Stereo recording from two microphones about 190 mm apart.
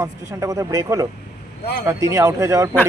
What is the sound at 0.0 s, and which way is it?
Speech, 20° right (ahead or behind).